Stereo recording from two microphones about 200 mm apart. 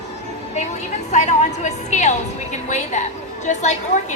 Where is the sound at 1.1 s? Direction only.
35° left (ahead or behind).